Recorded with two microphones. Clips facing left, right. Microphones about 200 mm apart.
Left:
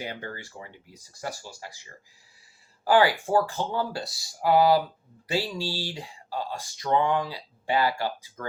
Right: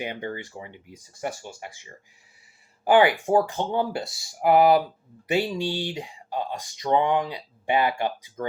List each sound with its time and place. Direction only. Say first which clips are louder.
0.0 s speech: right 5 dB; 20° right (ahead or behind)